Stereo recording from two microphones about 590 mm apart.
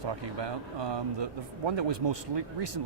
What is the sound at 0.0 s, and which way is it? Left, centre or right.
Speech, right.